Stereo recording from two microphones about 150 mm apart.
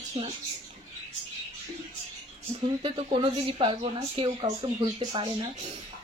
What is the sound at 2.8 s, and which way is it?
Speech, 40° right (ahead or behind).